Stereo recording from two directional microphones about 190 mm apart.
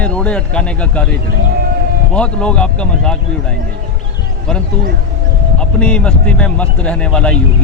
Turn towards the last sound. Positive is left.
turn(degrees=5)  # may be behind; listen again after turning